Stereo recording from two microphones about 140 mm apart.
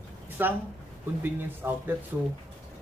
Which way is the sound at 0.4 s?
15° right (ahead or behind).